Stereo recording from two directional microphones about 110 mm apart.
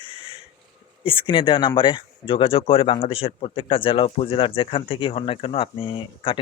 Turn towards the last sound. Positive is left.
turn(degrees=50)  # may be behind; listen again after turning